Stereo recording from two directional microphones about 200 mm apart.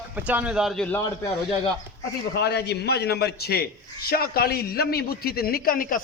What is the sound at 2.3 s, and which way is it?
A man's voice, 55° left (ahead or behind).